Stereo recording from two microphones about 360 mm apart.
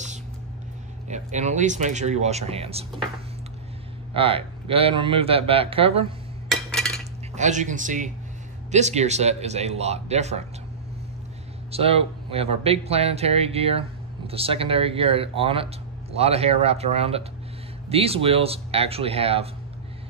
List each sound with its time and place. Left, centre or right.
1.0 s speech: centre
4.1 s speech: centre
6.5 s cutlery: centre
7.3 s speech: centre
11.7 s speech: centre